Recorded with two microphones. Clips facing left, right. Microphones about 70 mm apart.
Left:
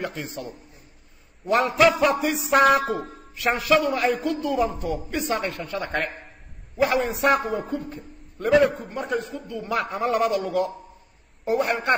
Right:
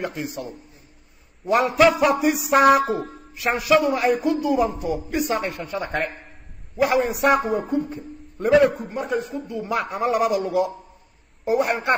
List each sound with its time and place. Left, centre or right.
0.0 s a man's voice: centre
1.4 s a man's voice: centre
5.5 s a woman's voice: centre
5.8 s a man's voice: centre